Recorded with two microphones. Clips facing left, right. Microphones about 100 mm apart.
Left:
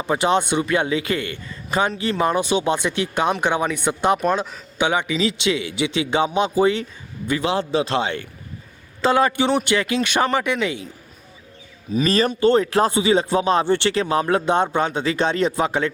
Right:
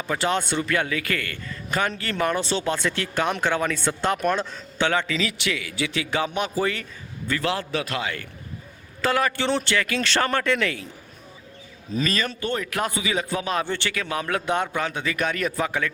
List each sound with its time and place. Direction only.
0.0 s speech: 20° left (ahead or behind)
12.0 s speech: 35° left (ahead or behind)